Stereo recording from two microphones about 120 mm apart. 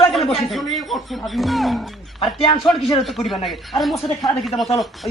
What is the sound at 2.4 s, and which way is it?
Speech, 45° left (ahead or behind).